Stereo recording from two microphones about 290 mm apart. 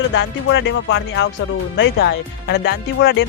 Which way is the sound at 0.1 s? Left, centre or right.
Left.